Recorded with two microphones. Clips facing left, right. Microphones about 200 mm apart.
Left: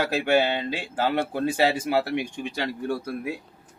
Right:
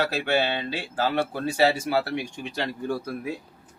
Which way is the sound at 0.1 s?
15° left (ahead or behind).